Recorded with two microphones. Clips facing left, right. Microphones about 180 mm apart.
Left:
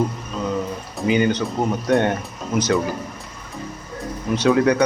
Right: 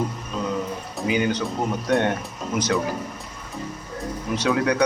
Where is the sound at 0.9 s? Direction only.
Centre (ahead or behind).